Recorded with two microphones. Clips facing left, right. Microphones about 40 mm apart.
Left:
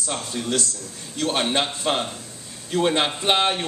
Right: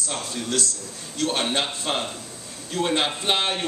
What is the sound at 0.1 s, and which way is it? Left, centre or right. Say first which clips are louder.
A man's voice: left 2 dB; centre.